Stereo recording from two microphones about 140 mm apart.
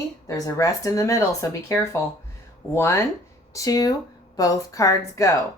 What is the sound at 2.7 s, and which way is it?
Speech, 20° left (ahead or behind).